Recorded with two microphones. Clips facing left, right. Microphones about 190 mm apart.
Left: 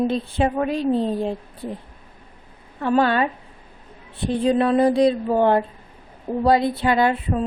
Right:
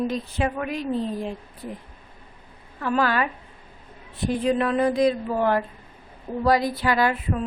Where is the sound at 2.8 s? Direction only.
25° left (ahead or behind).